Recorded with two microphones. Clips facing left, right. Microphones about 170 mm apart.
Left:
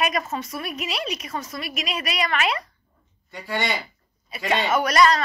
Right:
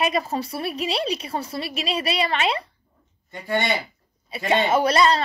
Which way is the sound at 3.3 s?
50° right (ahead or behind).